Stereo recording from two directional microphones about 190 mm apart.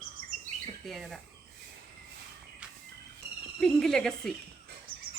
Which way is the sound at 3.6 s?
Centre (ahead or behind).